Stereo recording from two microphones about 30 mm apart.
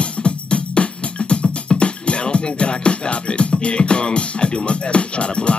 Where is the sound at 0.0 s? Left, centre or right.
Left.